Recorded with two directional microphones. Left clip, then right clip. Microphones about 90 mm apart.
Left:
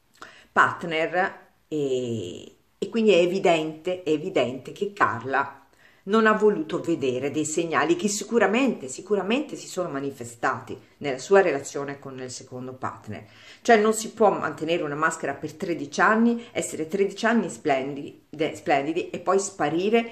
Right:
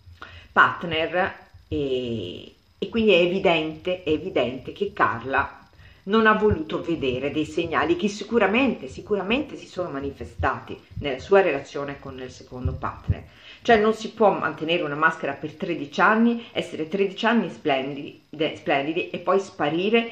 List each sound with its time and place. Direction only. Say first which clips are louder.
0.2 s speech: right 2 dB; 25° left (ahead or behind)
12.5 s speech: right 2 dB; 15° left (ahead or behind)